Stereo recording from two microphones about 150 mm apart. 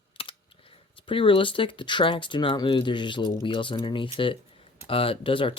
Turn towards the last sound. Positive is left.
turn(degrees=35)  # may be behind; listen again after turning